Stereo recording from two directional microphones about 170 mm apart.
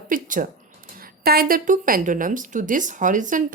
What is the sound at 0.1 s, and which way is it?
A woman's voice, 55° right (ahead or behind).